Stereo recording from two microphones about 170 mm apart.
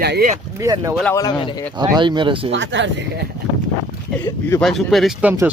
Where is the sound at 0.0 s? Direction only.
70° right (ahead or behind).